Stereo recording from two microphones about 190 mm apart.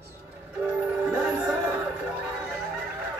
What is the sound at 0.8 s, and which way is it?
Music, 5° right (ahead or behind).